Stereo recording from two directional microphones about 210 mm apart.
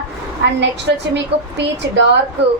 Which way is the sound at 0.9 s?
55° right (ahead or behind).